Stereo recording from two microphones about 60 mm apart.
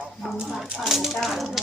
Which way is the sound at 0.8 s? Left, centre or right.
Centre.